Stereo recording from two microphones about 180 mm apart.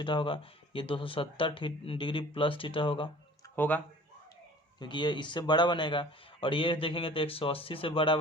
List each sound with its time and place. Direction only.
0.0 s speech: 25° left (ahead or behind)
3.5 s speech: 10° left (ahead or behind)
4.8 s speech: 25° left (ahead or behind)